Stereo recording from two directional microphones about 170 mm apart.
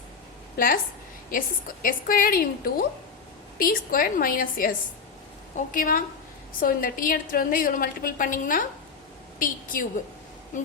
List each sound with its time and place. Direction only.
0.5 s a woman's voice: 55° left (ahead or behind)